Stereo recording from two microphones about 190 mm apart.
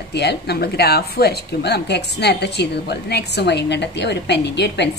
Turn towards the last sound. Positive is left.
turn(degrees=65)  # may be behind; listen again after turning